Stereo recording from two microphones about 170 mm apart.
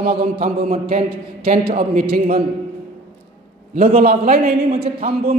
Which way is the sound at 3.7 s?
55° right (ahead or behind).